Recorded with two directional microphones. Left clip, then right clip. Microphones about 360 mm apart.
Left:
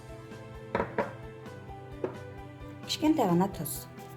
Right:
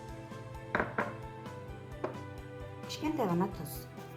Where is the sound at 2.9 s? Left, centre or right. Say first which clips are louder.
Left 7 dB; left.